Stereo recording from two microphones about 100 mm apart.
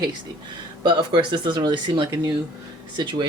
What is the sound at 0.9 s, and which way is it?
Speech, 50° right (ahead or behind).